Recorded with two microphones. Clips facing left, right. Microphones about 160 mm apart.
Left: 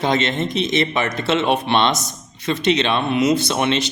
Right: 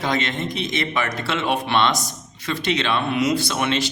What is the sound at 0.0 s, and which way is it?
Speech, 25° left (ahead or behind).